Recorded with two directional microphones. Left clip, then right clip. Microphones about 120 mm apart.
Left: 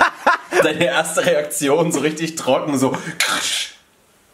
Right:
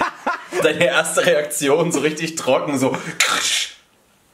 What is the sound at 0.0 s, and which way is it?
Chuckle, 45° left (ahead or behind).